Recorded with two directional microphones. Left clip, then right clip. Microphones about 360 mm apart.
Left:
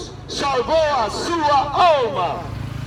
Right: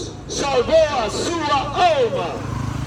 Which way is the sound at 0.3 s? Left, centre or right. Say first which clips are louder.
Right 2 dB; centre.